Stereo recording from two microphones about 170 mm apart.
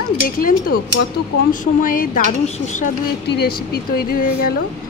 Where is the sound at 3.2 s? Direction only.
70° left (ahead or behind).